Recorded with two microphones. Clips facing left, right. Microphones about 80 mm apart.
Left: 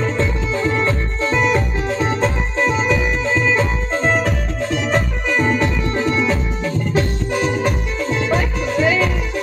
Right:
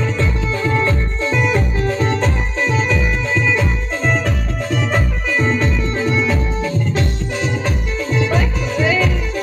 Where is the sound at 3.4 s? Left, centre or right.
Left.